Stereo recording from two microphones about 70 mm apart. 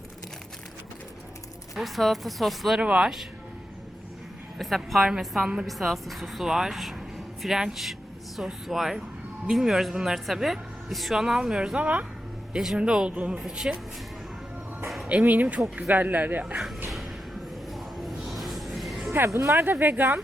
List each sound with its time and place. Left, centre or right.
1.7 s speech: centre
2.8 s speech: centre
4.5 s speech: centre
13.4 s speech: centre
14.8 s music: centre
15.1 s speech: right
17.7 s a sound: centre
19.3 s speech: right
19.6 s speech: right